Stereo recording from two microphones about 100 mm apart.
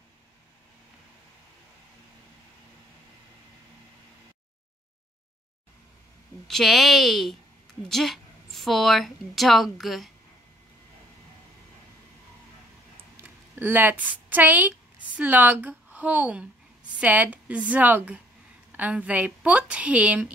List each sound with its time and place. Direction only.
6.4 s a woman's voice: centre (ahead or behind)
13.2 s a woman's voice: 15° right (ahead or behind)